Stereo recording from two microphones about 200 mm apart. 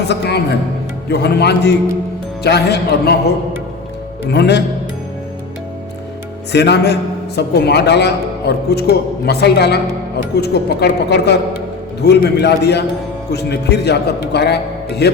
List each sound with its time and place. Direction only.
0.1 s a man's voice: 55° left (ahead or behind)
4.3 s a man's voice: 55° left (ahead or behind)
6.5 s a man's voice: 55° left (ahead or behind)